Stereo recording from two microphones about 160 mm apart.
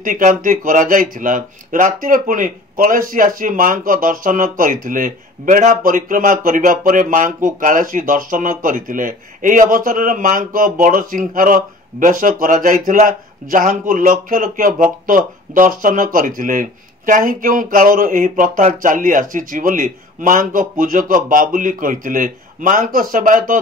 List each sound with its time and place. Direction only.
0.0 s speech: 55° right (ahead or behind)